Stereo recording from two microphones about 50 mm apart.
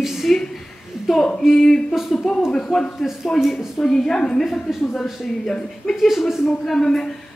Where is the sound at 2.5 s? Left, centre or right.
Centre.